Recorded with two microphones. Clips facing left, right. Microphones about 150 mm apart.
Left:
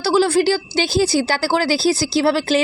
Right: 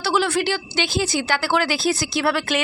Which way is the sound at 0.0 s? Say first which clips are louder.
Left 6 dB; 30° left (ahead or behind).